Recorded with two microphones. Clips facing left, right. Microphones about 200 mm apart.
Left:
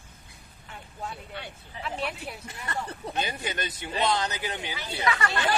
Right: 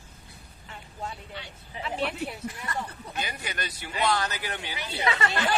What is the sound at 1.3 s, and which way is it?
Speech, 55° left (ahead or behind).